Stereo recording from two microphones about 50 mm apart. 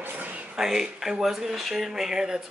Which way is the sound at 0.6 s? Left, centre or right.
Centre.